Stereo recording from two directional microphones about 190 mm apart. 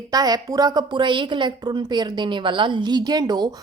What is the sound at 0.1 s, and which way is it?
A woman's voice, 20° right (ahead or behind).